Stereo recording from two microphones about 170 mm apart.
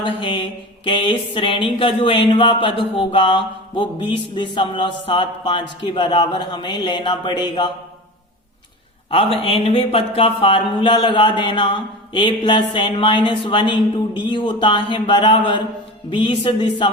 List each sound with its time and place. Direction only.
0.0 s speech: 30° left (ahead or behind)
9.4 s speech: 35° left (ahead or behind)